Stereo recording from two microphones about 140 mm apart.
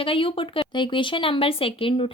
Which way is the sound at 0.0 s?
40° left (ahead or behind).